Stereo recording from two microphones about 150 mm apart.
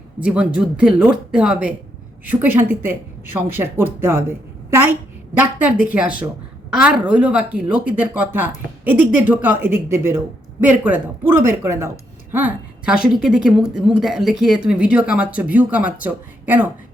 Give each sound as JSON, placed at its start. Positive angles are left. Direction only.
{"t": 0.2, "sound": "a woman's voice", "side_deg": -5}